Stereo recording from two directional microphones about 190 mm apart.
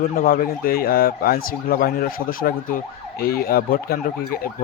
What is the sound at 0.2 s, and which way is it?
Speech, 50° left (ahead or behind).